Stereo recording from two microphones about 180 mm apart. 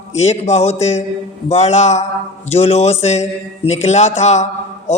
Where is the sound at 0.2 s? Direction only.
40° left (ahead or behind).